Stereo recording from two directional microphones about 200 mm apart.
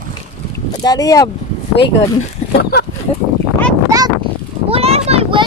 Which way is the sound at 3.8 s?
15° right (ahead or behind).